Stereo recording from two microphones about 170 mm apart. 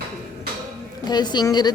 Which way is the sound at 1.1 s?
25° left (ahead or behind).